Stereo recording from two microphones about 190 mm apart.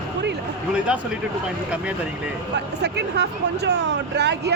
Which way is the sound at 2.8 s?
60° right (ahead or behind).